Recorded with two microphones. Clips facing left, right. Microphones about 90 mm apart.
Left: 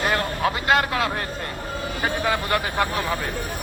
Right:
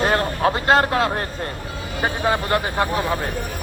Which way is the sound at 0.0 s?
30° right (ahead or behind).